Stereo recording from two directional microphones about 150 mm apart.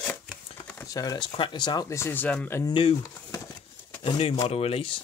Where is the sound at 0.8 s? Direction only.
25° left (ahead or behind).